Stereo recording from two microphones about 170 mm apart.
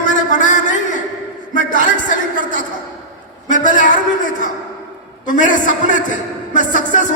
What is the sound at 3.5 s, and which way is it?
A man's voice, 50° left (ahead or behind).